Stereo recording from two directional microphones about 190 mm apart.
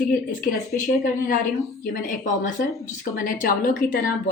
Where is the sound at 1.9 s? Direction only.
45° left (ahead or behind).